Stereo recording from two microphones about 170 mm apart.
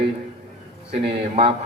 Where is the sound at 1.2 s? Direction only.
35° right (ahead or behind).